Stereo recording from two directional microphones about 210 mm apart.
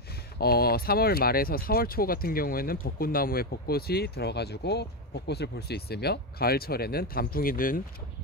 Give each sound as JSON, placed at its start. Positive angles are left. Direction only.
{"t": 0.4, "sound": "speech", "side_deg": 45}